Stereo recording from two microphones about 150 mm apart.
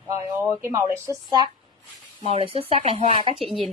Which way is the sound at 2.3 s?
40° right (ahead or behind).